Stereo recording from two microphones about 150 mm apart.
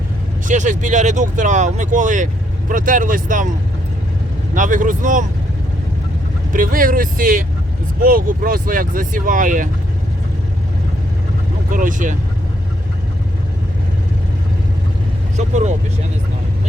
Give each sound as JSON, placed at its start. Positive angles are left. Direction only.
{"t": 0.4, "sound": "speech", "side_deg": -55}
{"t": 4.5, "sound": "speech", "side_deg": -60}
{"t": 6.5, "sound": "speech", "side_deg": -65}
{"t": 11.7, "sound": "speech", "side_deg": -60}
{"t": 15.4, "sound": "speech", "side_deg": -50}